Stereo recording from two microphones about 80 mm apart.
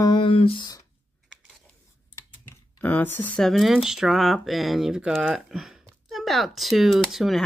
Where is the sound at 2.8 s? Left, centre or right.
Left.